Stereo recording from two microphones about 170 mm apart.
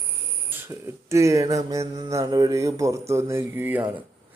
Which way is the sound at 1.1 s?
15° right (ahead or behind).